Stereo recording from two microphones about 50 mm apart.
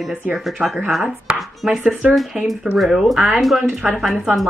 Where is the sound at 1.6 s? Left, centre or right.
Centre.